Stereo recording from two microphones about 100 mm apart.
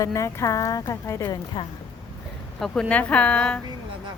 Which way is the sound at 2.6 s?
10° left (ahead or behind).